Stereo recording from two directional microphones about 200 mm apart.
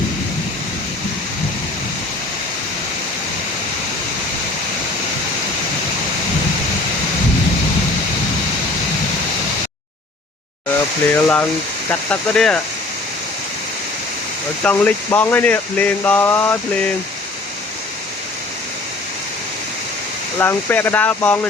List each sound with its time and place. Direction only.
11.1 s speech: 10° left (ahead or behind)
14.6 s speech: 5° left (ahead or behind)
20.4 s speech: 10° left (ahead or behind)